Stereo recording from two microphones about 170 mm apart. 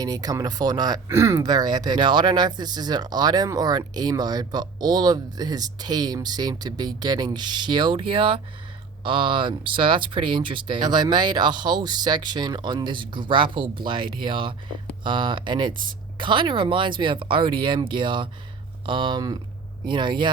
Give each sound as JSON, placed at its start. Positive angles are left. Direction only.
{"t": 0.0, "sound": "speech", "side_deg": -20}